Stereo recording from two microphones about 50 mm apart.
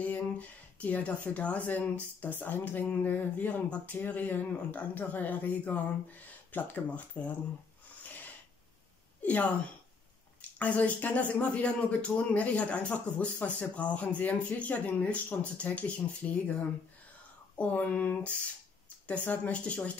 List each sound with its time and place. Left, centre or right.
0.0 s speech: left
9.2 s speech: left
10.6 s speech: left
17.6 s speech: left